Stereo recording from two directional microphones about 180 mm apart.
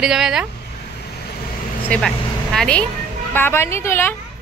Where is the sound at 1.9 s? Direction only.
5° left (ahead or behind).